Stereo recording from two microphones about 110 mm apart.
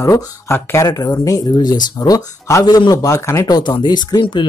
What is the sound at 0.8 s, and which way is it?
Speech, 35° left (ahead or behind).